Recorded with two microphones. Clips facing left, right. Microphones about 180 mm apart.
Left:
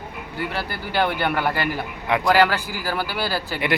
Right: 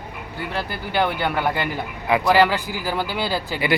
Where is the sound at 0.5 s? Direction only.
20° right (ahead or behind).